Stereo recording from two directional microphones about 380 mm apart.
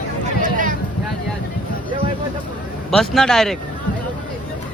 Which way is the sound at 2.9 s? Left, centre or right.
Centre.